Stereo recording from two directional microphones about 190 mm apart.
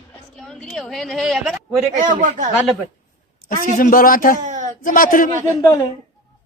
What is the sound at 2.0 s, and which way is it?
Speech, 40° right (ahead or behind).